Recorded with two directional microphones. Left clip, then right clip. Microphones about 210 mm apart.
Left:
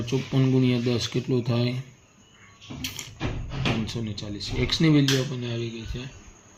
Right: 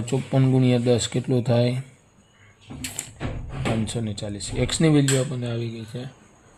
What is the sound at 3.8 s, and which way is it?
Speech, 60° right (ahead or behind).